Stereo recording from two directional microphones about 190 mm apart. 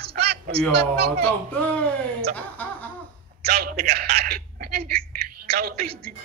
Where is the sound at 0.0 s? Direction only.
60° right (ahead or behind).